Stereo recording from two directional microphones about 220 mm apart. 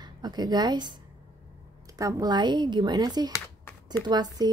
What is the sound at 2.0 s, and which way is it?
A woman's voice, 15° right (ahead or behind).